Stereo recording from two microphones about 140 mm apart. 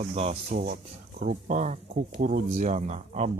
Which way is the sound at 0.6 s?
75° right (ahead or behind).